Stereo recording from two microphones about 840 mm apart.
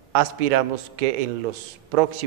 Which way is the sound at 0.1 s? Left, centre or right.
Right.